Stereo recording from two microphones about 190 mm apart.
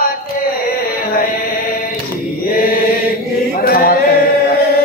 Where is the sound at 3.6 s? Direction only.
50° left (ahead or behind).